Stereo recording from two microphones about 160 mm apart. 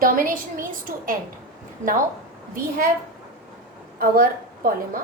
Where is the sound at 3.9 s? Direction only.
65° right (ahead or behind).